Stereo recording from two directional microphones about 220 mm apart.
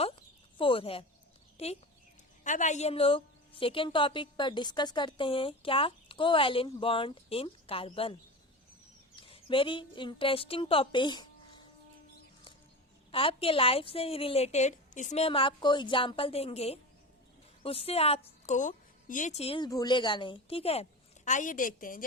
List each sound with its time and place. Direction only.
0.0 s a sound: 25° left (ahead or behind)
1.5 s a woman's voice: 30° left (ahead or behind)
13.1 s a woman's voice: 25° left (ahead or behind)